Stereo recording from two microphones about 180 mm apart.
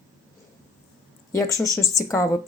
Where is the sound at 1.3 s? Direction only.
20° left (ahead or behind).